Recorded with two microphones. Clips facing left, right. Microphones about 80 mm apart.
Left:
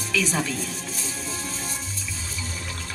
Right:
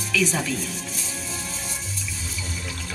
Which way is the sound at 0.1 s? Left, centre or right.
Left.